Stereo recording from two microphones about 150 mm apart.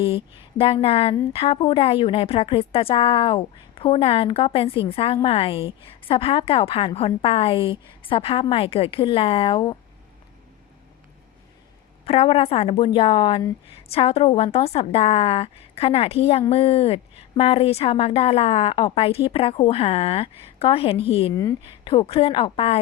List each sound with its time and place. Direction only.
0.6 s a woman's voice: 40° left (ahead or behind)
12.0 s a woman's voice: 40° left (ahead or behind)